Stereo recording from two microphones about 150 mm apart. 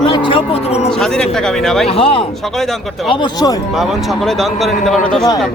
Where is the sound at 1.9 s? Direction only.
40° left (ahead or behind).